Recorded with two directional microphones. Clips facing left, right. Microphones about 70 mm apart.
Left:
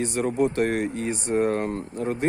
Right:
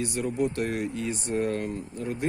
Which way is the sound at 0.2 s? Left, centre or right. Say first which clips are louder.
Left 5 dB; left.